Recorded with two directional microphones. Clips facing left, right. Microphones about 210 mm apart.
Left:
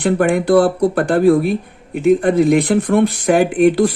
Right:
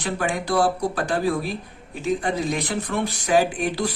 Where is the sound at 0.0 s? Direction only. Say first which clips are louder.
Left 11 dB; 55° left (ahead or behind).